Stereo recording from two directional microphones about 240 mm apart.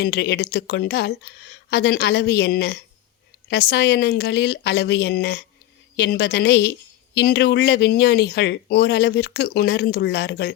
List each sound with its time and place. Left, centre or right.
0.0 s a woman's voice: left